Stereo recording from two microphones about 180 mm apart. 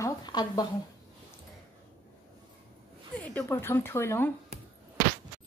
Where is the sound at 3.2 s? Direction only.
10° left (ahead or behind).